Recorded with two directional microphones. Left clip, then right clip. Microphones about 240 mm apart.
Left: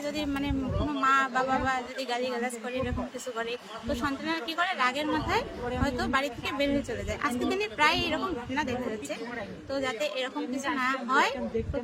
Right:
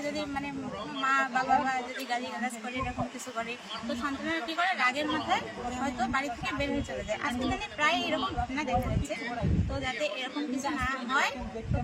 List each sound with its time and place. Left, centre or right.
0.2 s speech: left
4.0 s speech: left
9.7 s speech: centre